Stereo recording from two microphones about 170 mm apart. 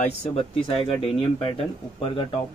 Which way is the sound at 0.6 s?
30° left (ahead or behind).